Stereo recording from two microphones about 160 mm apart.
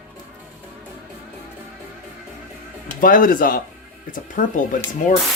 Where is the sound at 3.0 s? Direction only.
60° left (ahead or behind).